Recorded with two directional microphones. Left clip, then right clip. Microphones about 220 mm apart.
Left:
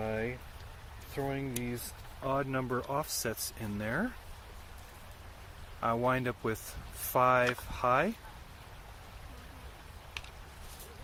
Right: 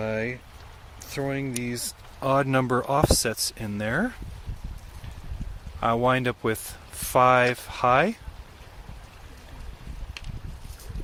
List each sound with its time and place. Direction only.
0.0 s a sound: 50° right (ahead or behind)
1.1 s speech: 50° right (ahead or behind)
3.6 s speech: 35° right (ahead or behind)
5.8 s speech: 35° right (ahead or behind)